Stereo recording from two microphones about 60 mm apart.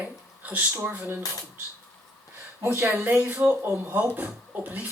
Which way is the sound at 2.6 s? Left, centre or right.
Right.